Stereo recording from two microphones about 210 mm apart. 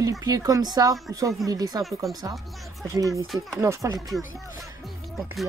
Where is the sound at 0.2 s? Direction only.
15° right (ahead or behind).